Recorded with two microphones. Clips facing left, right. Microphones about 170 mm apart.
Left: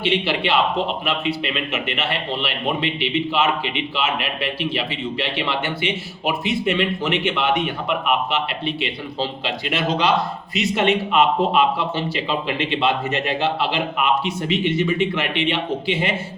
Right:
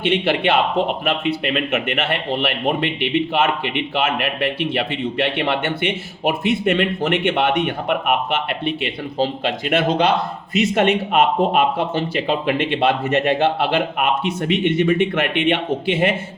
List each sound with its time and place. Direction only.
0.0 s a man's voice: 55° right (ahead or behind)